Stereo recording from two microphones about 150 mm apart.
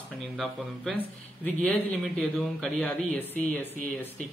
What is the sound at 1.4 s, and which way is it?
A man's voice, 10° left (ahead or behind).